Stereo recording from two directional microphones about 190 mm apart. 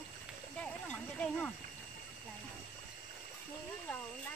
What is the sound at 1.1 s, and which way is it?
Speech, 5° left (ahead or behind).